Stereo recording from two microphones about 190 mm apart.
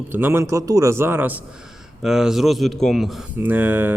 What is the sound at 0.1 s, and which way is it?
A man's voice, 10° right (ahead or behind).